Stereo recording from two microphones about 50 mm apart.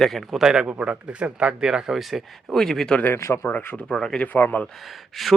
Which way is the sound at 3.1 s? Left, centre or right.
Left.